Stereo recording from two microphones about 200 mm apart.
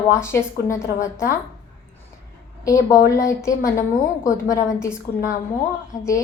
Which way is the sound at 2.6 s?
15° left (ahead or behind).